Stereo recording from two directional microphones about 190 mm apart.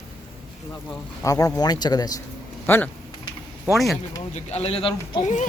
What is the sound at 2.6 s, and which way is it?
Speech, 10° left (ahead or behind).